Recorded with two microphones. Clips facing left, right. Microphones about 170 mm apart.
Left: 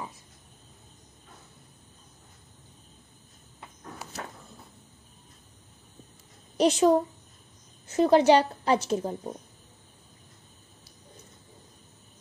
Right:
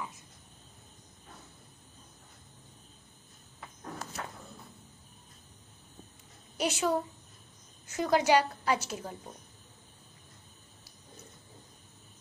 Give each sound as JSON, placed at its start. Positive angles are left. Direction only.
{"t": 6.5, "sound": "a child's voice", "side_deg": 35}